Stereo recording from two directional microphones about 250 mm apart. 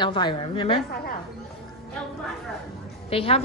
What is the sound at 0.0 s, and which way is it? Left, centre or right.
Speech, centre.